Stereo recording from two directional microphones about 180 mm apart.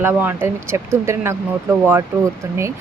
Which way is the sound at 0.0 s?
10° right (ahead or behind).